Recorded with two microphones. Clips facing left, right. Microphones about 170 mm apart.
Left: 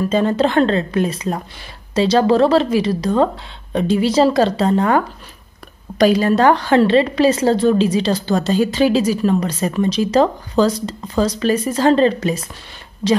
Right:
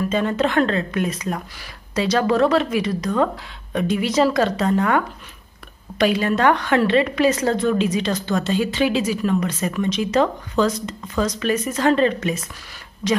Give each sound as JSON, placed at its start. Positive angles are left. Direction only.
{"t": 0.0, "sound": "a woman's voice", "side_deg": 30}